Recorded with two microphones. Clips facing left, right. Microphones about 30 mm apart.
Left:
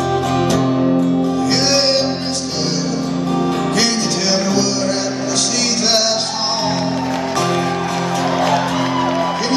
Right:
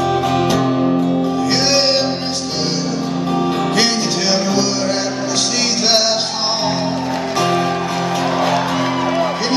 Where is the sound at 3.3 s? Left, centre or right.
Centre.